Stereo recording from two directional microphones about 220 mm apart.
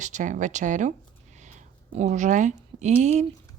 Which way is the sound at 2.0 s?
30° right (ahead or behind).